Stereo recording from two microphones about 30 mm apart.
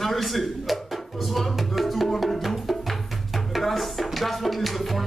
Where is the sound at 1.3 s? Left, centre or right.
Centre.